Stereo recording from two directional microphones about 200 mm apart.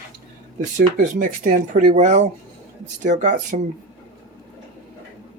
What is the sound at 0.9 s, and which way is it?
Speech, 40° right (ahead or behind).